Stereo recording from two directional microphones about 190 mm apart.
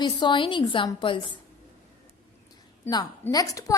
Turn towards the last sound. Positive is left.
turn(degrees=15)  # may be behind; listen again after turning